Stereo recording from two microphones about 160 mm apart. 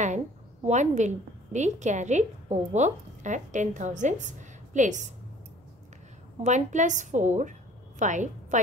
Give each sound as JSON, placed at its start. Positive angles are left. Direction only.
{"t": 0.7, "sound": "a woman's voice", "side_deg": -45}
{"t": 6.4, "sound": "a woman's voice", "side_deg": -50}